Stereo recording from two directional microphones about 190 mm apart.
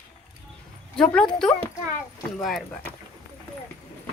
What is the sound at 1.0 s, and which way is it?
Speech, 5° left (ahead or behind).